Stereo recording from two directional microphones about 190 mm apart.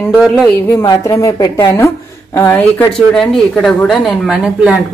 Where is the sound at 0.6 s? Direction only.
15° left (ahead or behind).